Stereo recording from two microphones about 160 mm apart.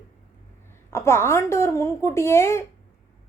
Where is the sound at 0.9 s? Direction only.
15° left (ahead or behind).